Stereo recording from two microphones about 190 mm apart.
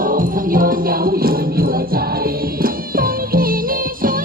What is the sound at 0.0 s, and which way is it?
Music, 45° right (ahead or behind).